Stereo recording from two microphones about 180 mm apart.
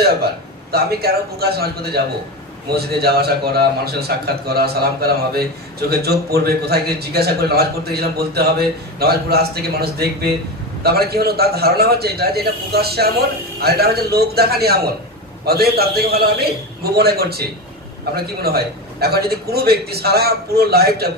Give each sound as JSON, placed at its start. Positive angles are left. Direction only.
{"t": 0.0, "sound": "a man's voice", "side_deg": -60}